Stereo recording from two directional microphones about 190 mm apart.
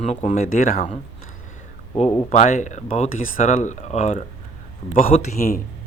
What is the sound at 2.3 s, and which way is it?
Speech, 40° left (ahead or behind).